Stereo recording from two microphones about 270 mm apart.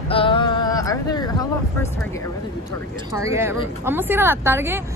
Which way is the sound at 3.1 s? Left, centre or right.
Centre.